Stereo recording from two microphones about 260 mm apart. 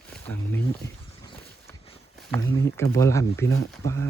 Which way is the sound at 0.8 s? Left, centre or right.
Centre.